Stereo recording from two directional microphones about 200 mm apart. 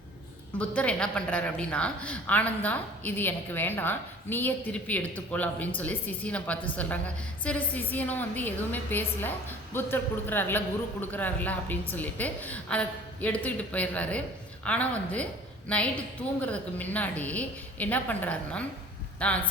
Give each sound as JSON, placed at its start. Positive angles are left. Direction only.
{"t": 0.6, "sound": "a woman's voice", "side_deg": 5}